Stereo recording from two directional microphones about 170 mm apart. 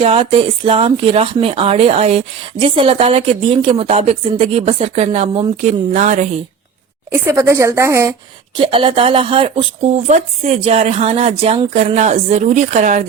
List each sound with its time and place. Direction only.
0.0 s speech: 35° right (ahead or behind)
7.1 s speech: 15° right (ahead or behind)
8.5 s speech: 30° right (ahead or behind)